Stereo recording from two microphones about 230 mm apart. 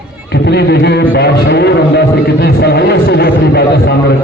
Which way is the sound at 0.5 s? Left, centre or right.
Left.